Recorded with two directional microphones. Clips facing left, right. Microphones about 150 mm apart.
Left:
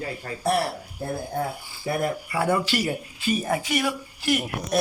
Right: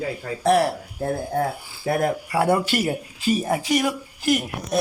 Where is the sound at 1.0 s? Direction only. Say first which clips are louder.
Right 5 dB; 80° right; by 2.8 s 55° right (ahead or behind).